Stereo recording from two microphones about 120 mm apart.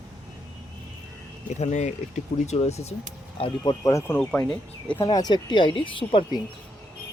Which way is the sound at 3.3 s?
50° left (ahead or behind).